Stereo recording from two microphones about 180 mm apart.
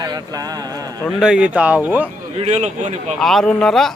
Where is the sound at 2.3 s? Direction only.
40° right (ahead or behind).